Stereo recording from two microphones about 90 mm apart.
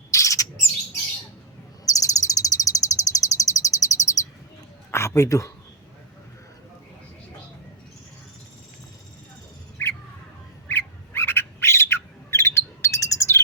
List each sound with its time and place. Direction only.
0.1 s bird: 35° left (ahead or behind)
1.8 s bird vocalization: 40° left (ahead or behind)
4.9 s a sound: 30° left (ahead or behind)
9.8 s squawk: 25° left (ahead or behind)